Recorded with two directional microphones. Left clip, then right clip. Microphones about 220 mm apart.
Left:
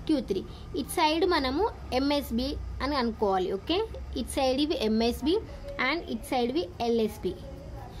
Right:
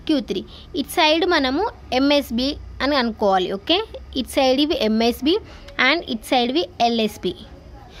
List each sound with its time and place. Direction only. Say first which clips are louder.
0.0 s a woman's voice: right 6 dB; 35° right (ahead or behind)